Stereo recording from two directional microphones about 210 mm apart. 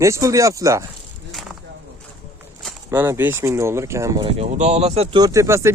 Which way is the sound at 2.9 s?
10° right (ahead or behind).